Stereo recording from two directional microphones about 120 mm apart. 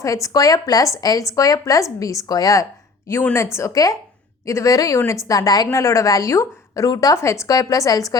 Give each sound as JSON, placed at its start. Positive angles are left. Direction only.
{"t": 0.0, "sound": "a woman's voice", "side_deg": 30}